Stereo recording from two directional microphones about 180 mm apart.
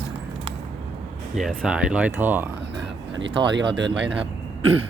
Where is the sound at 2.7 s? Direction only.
85° right.